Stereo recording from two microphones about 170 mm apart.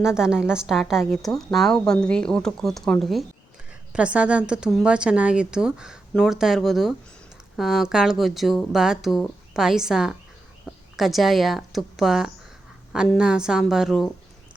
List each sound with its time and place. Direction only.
0.0 s a woman's voice: 5° right (ahead or behind)